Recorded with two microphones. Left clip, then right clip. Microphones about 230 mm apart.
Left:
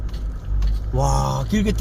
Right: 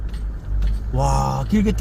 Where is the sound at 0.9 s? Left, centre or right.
Centre.